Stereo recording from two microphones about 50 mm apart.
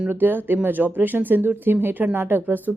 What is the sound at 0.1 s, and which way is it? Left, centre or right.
Speech, right.